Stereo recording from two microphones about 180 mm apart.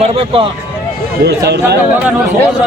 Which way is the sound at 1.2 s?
65° right (ahead or behind).